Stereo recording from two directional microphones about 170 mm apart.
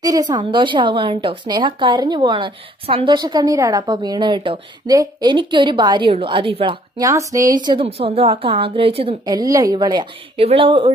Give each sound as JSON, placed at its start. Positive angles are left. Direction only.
{"t": 0.0, "sound": "a woman's voice", "side_deg": -25}
{"t": 7.1, "sound": "a woman's voice", "side_deg": -20}